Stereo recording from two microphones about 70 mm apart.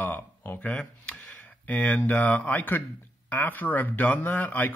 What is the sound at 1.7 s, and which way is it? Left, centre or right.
Speech, left.